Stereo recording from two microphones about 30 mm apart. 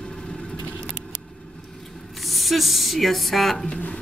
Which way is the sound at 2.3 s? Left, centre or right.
Centre.